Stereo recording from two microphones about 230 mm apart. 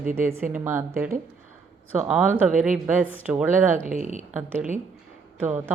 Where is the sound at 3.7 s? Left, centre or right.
Right.